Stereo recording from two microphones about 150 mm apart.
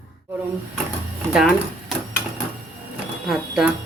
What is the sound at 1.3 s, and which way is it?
Speech, centre (ahead or behind).